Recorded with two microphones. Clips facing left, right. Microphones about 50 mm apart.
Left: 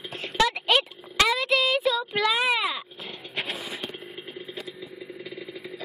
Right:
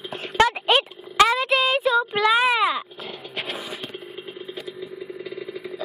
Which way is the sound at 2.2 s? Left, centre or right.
Centre.